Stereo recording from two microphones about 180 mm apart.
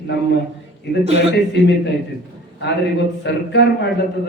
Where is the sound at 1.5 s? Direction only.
70° left (ahead or behind).